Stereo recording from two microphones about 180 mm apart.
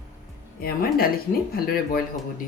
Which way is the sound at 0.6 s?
55° left (ahead or behind).